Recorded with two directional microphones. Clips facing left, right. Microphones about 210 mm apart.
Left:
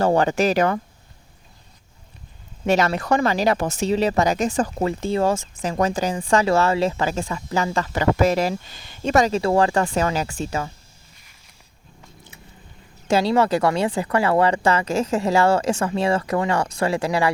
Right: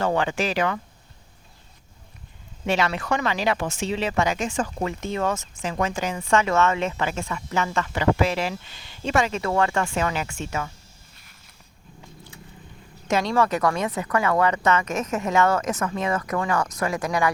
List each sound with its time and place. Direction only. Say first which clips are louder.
0.0 s speech: left 5 dB; 40° left (ahead or behind)
2.6 s speech: left 4 dB; 40° left (ahead or behind)
13.1 s speech: left 4 dB; 30° left (ahead or behind)